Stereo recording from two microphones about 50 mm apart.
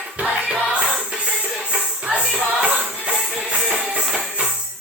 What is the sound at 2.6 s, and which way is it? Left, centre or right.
Music, right.